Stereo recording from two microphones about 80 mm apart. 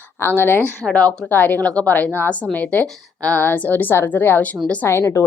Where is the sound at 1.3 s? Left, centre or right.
Left.